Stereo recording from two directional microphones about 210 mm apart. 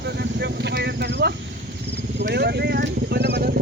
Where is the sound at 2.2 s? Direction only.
55° right (ahead or behind).